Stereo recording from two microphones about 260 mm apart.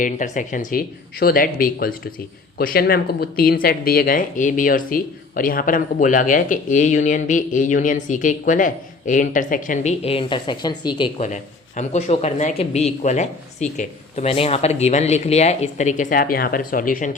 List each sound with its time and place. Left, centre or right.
0.0 s speech: left